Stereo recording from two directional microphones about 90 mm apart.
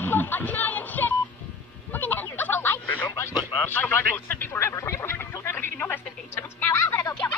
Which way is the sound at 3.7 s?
25° left (ahead or behind).